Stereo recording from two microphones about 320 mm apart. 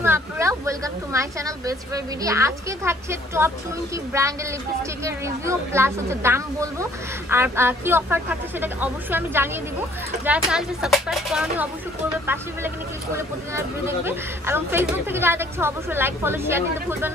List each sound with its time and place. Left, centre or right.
0.0 s speech: centre